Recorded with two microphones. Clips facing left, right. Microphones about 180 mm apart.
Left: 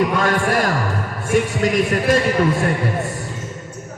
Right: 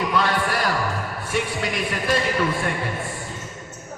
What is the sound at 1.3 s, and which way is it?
Speech, 45° left (ahead or behind).